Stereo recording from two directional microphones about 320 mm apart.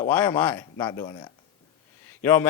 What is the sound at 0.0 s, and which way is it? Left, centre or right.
A man's voice, centre.